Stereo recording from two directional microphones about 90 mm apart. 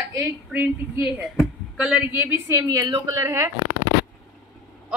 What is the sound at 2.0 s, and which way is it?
Speech, 25° right (ahead or behind).